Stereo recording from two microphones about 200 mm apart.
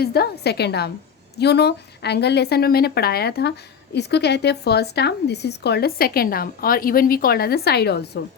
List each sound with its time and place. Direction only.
0.0 s a woman's voice: 50° left (ahead or behind)